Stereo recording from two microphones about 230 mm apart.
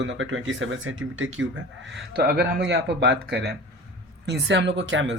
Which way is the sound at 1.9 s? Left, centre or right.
Right.